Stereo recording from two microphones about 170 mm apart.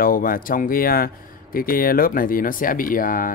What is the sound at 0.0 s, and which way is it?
Speech, 55° left (ahead or behind).